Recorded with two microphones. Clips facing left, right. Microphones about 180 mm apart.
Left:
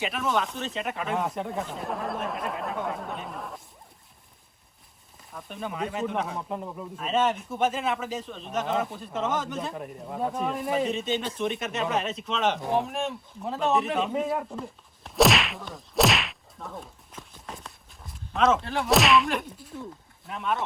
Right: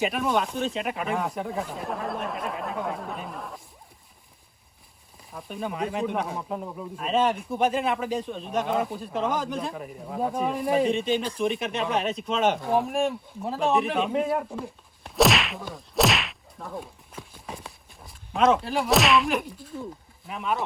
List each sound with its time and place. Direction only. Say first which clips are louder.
0.0 s speech: right 5 dB; 45° right (ahead or behind)
0.3 s speech: right 3 dB; centre (ahead or behind)
5.6 s speech: right 2 dB; 5° right (ahead or behind)
7.2 s speech: right 1 dB; 10° right (ahead or behind)
8.4 s speech: right 1 dB; centre (ahead or behind)